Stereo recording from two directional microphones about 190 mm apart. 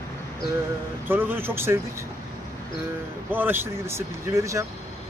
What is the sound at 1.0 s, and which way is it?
Speech, 10° right (ahead or behind).